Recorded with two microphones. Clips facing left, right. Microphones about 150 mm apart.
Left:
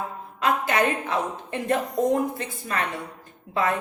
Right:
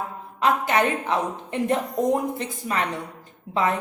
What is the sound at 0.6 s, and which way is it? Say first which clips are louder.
Speech: right 1 dB; 20° right (ahead or behind).